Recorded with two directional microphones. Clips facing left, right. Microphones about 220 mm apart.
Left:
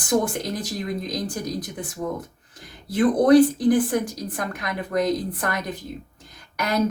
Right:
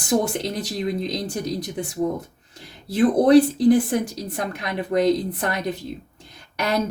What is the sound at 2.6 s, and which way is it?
A woman's voice, 30° right (ahead or behind).